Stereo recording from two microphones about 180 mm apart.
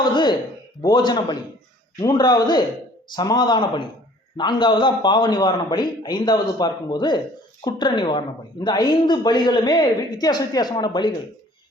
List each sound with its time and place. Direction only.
0.0 s speech: 25° left (ahead or behind)